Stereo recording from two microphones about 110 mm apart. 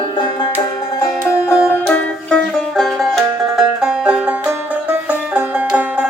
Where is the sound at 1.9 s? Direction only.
10° left (ahead or behind).